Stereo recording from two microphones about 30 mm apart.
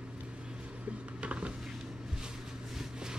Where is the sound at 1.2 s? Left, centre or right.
Right.